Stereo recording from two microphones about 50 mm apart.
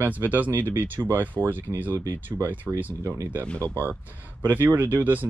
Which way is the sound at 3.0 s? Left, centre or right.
Right.